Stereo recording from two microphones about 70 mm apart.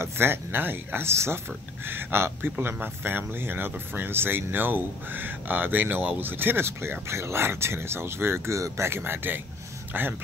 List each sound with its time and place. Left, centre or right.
0.0 s speech: right